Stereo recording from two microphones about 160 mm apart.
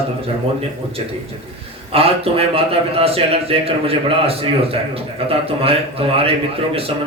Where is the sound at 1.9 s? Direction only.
35° right (ahead or behind).